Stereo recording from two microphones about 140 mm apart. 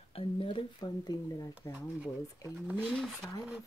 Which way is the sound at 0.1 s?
40° left (ahead or behind).